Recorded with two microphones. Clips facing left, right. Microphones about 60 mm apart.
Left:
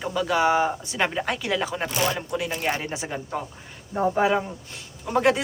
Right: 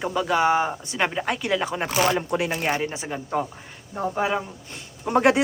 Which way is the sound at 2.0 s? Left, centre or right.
Right.